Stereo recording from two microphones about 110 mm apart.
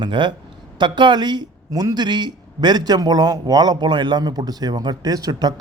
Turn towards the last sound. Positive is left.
turn(degrees=-35)  # may be behind; listen again after turning